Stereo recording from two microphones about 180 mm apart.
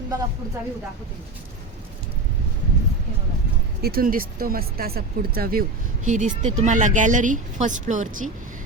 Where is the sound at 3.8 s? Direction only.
60° right (ahead or behind).